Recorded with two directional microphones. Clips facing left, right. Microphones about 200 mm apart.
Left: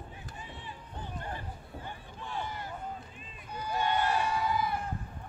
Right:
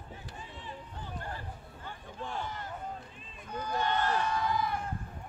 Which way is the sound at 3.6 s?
10° left (ahead or behind).